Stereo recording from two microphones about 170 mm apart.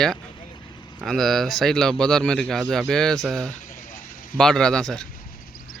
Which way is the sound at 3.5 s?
55° left (ahead or behind).